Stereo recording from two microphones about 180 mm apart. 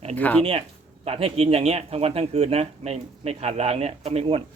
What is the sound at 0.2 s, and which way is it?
Speech, 10° left (ahead or behind).